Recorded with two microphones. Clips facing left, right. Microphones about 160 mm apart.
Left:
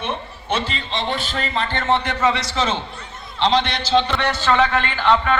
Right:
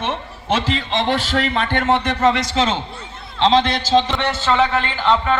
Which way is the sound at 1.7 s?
60° right (ahead or behind).